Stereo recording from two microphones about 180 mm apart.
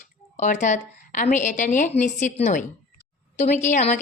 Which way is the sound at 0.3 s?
40° left (ahead or behind).